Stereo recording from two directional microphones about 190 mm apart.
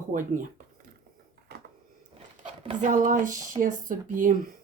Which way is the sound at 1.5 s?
55° right (ahead or behind).